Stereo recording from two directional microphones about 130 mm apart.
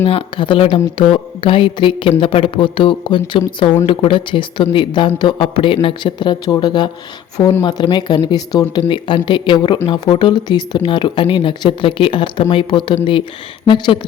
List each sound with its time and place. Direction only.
0.0 s speech: 40° left (ahead or behind)